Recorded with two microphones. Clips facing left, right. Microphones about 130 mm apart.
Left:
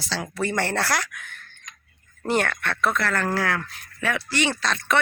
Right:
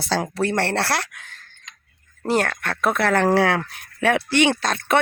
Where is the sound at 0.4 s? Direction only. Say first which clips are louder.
Even; 30° right (ahead or behind).